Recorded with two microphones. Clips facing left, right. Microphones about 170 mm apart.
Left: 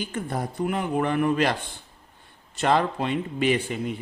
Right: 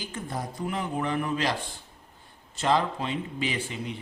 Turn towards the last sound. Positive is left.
turn(degrees=50)  # may be behind; listen again after turning